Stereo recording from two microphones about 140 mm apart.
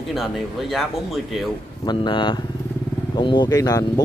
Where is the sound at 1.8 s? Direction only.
35° left (ahead or behind).